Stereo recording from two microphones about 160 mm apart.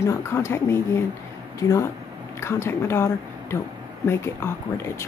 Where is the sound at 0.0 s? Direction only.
15° left (ahead or behind).